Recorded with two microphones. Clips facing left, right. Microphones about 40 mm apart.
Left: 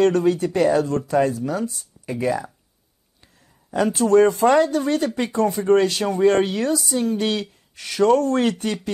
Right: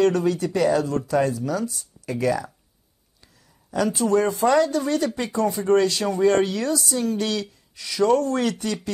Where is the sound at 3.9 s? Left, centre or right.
Left.